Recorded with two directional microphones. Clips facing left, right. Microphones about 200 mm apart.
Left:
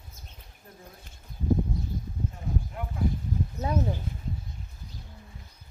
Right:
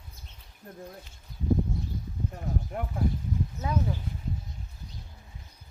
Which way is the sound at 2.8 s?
50° right (ahead or behind).